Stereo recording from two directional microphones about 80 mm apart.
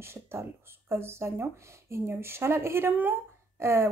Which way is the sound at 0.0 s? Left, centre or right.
Right.